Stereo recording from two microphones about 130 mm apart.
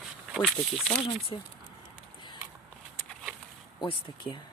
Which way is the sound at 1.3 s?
40° left (ahead or behind).